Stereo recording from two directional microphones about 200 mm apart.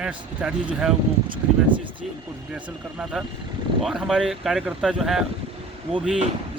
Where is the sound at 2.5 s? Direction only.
5° right (ahead or behind).